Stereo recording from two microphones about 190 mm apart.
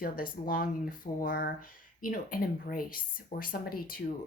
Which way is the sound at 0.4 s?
45° left (ahead or behind).